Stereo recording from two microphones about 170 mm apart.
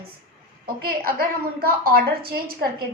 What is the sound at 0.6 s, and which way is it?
A woman's voice, 60° right (ahead or behind).